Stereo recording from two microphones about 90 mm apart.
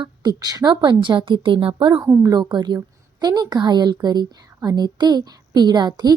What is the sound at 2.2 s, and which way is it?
A woman's voice, 50° right (ahead or behind).